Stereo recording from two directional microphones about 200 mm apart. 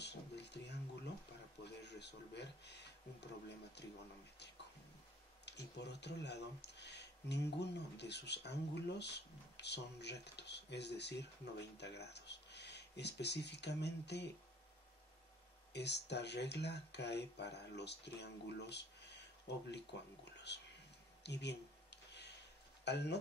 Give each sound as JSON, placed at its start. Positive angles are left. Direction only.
{"t": 0.0, "sound": "a sound", "side_deg": 60}
{"t": 1.6, "sound": "speech", "side_deg": 60}
{"t": 5.4, "sound": "speech", "side_deg": 60}
{"t": 15.7, "sound": "speech", "side_deg": 60}
{"t": 21.2, "sound": "a sound", "side_deg": 60}
{"t": 22.8, "sound": "speech", "side_deg": 55}